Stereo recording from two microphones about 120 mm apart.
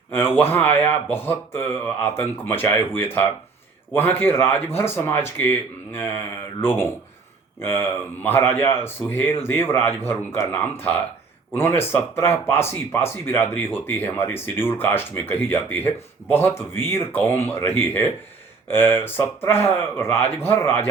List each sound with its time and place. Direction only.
0.1 s speech: 20° left (ahead or behind)